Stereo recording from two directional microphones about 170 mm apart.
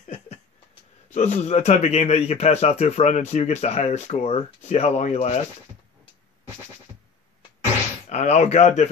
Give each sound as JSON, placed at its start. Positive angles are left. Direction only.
{"t": 0.0, "sound": "a sound", "side_deg": 45}
{"t": 1.1, "sound": "a man's voice", "side_deg": 45}
{"t": 8.1, "sound": "a man's voice", "side_deg": 40}